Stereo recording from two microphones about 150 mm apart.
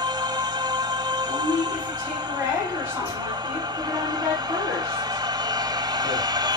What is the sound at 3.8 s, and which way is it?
Music, 25° right (ahead or behind).